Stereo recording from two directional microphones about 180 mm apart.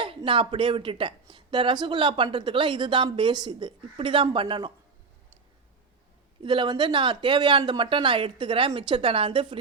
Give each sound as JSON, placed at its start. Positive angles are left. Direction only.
{"t": 0.2, "sound": "speech", "side_deg": -30}
{"t": 6.4, "sound": "speech", "side_deg": -25}